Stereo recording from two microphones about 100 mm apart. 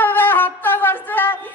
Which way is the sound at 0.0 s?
20° left (ahead or behind).